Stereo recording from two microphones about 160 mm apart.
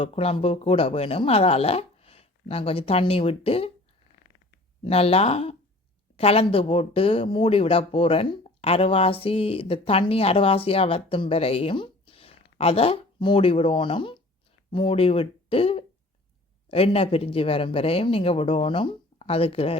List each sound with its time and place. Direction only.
0.0 s speech: 40° left (ahead or behind)
4.8 s speech: 40° left (ahead or behind)